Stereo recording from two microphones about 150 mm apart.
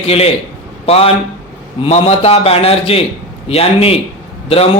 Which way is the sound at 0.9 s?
40° left (ahead or behind).